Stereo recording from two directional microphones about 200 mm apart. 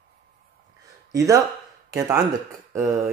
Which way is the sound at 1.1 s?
15° right (ahead or behind).